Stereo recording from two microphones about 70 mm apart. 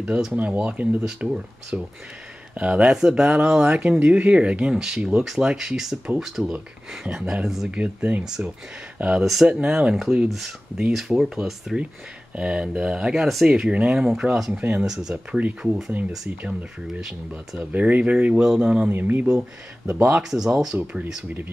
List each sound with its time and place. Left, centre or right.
0.0 s speech: centre
9.2 s speech: centre
13.5 s speech: centre
14.9 s speech: centre
17.6 s speech: right
18.4 s speech: centre
18.9 s speech: right
20.2 s speech: centre